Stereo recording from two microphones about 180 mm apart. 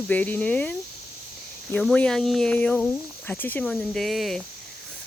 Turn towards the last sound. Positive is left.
turn(degrees=0)  # may be behind; listen again after turning